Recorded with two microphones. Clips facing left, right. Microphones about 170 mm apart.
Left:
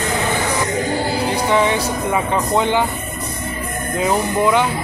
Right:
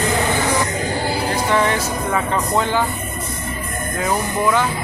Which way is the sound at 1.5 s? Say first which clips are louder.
Left 2 dB; 15° left (ahead or behind).